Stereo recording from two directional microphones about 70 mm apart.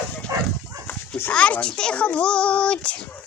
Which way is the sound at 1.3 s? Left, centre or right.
Centre.